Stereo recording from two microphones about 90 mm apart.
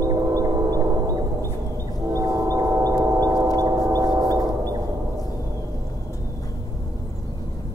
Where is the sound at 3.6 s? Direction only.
40° right (ahead or behind).